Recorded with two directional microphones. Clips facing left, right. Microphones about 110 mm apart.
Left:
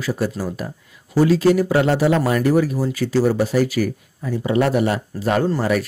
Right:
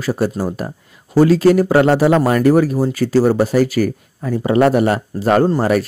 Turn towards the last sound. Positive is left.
turn(degrees=-50)  # may be behind; listen again after turning